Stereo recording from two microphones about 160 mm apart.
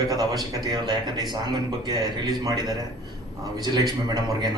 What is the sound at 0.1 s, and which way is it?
A man's voice, 25° right (ahead or behind).